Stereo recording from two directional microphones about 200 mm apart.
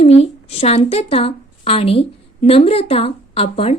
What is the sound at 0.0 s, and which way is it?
A woman's voice, 30° left (ahead or behind).